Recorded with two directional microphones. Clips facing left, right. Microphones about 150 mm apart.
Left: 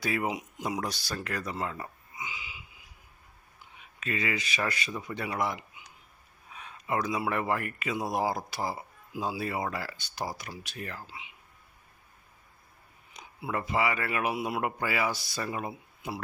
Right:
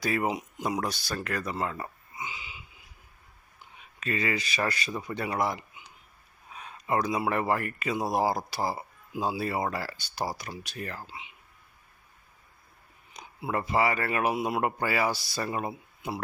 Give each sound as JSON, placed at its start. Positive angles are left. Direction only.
{"t": 0.0, "sound": "speech", "side_deg": -40}
{"t": 2.1, "sound": "a sound", "side_deg": -30}
{"t": 4.0, "sound": "speech", "side_deg": -40}
{"t": 13.1, "sound": "speech", "side_deg": -35}
{"t": 14.3, "sound": "a man's voice", "side_deg": -25}
{"t": 14.6, "sound": "speech", "side_deg": -40}